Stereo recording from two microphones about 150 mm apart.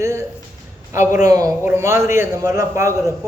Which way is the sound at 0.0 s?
20° right (ahead or behind).